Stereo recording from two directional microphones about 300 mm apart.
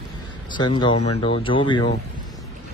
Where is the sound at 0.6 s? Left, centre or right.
Centre.